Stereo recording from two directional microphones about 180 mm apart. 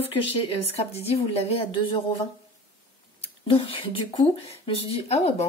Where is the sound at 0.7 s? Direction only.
35° left (ahead or behind).